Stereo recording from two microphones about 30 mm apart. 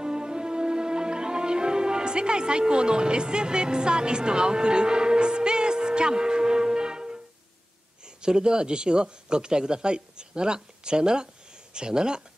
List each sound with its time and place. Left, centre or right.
0.0 s music: right
8.0 s speech: right